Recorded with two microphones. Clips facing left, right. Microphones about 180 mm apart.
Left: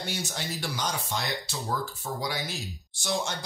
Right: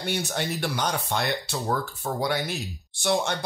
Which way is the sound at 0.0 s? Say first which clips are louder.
Right 6 dB; 60° right (ahead or behind).